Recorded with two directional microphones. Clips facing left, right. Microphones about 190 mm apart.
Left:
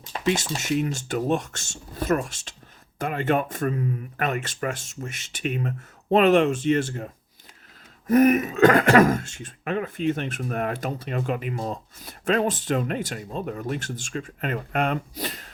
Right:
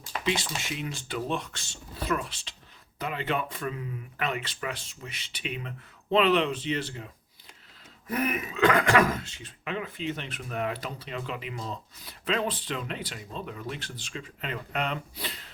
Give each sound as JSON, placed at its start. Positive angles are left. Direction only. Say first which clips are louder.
{"t": 0.3, "sound": "speech", "louder": "left 7 dB", "side_deg": 45}